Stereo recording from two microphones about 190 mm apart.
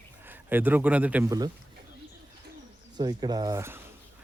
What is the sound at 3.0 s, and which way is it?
Speech, 20° right (ahead or behind).